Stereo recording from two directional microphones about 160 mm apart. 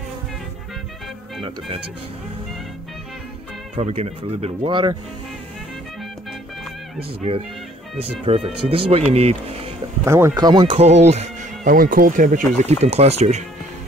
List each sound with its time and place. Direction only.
3.7 s speech: 40° right (ahead or behind)
8.2 s speech: 35° right (ahead or behind)
10.0 s speech: 15° right (ahead or behind)
10.8 s speech: 45° right (ahead or behind)
12.8 s speech: 40° right (ahead or behind)